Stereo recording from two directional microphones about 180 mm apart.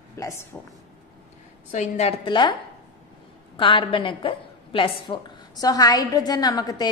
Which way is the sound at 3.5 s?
30° left (ahead or behind).